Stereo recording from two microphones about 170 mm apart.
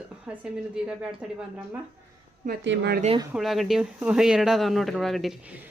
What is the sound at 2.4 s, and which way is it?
Speech, 80° right.